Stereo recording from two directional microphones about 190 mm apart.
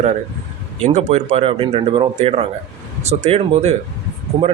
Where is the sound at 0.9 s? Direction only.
35° right (ahead or behind).